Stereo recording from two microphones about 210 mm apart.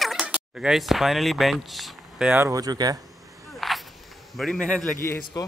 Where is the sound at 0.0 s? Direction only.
Centre (ahead or behind); by 3.0 s 20° right (ahead or behind).